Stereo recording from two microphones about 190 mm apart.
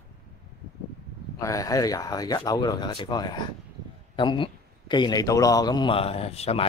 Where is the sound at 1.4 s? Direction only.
15° left (ahead or behind).